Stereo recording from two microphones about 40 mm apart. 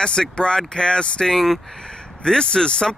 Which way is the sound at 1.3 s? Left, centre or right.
Centre.